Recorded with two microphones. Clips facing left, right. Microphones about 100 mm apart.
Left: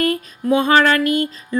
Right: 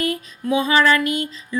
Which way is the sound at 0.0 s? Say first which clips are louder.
Left 4 dB; 50° left (ahead or behind).